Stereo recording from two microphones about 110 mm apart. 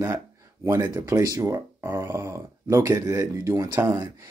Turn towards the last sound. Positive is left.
turn(degrees=-25)  # may be behind; listen again after turning